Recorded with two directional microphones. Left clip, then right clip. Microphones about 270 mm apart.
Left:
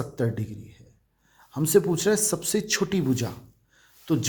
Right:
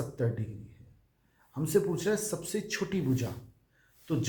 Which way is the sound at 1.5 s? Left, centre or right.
Left.